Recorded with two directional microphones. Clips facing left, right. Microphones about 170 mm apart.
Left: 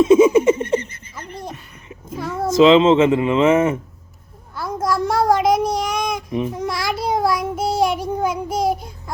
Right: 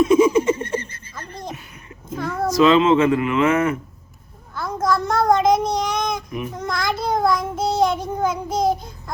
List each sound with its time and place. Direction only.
0.0 s giggle: 25° left (ahead or behind)
2.3 s speech: 25° left (ahead or behind)
4.5 s child singing: 10° left (ahead or behind)